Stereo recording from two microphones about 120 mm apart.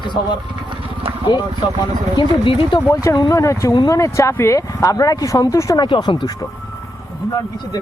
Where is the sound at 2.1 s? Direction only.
45° left (ahead or behind).